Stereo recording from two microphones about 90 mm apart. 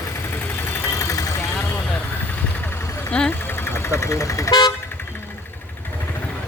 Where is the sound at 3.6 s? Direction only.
25° left (ahead or behind); by 4.7 s 45° left (ahead or behind).